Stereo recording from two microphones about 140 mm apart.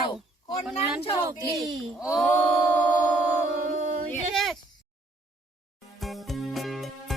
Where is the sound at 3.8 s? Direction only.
70° right (ahead or behind).